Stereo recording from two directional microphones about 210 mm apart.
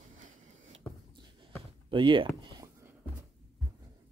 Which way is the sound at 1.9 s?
25° right (ahead or behind).